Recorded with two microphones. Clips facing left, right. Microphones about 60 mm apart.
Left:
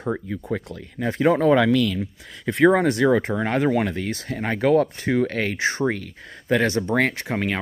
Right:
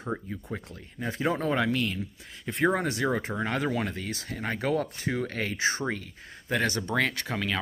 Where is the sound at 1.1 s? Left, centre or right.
Left.